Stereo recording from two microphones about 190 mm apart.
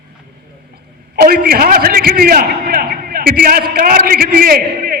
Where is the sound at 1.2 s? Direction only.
50° right (ahead or behind).